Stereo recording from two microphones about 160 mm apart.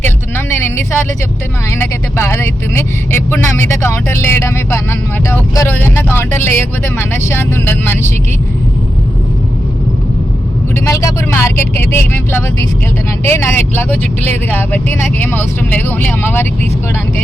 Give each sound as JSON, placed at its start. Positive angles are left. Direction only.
{"t": 0.0, "sound": "a sound", "side_deg": 15}
{"t": 1.7, "sound": "speech", "side_deg": 15}
{"t": 10.8, "sound": "speech", "side_deg": 20}